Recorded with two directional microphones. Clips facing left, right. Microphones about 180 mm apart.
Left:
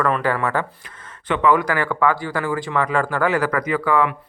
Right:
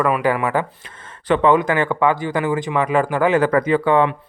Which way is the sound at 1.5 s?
20° right (ahead or behind).